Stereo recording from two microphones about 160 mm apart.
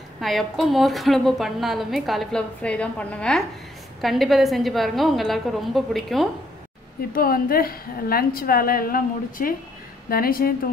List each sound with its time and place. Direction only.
0.2 s a woman's voice: centre (ahead or behind)
7.1 s a woman's voice: 65° left (ahead or behind)